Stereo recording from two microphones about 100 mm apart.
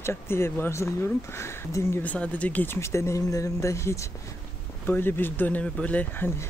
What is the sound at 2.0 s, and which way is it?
Speech, 15° left (ahead or behind).